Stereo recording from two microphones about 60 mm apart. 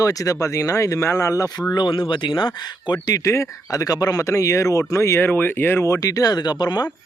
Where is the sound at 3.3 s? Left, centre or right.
Left.